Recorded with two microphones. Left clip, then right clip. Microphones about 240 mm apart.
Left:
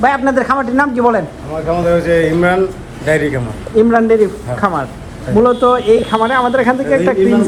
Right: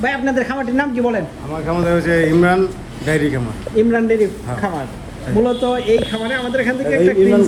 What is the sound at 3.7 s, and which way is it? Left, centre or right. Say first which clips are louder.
Speech: left 5 dB; left.